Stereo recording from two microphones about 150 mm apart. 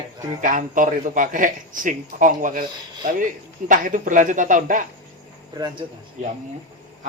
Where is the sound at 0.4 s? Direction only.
60° right (ahead or behind).